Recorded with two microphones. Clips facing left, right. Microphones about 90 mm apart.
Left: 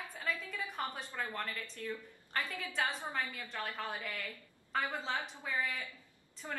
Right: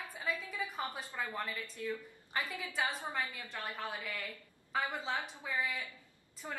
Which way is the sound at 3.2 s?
5° right (ahead or behind).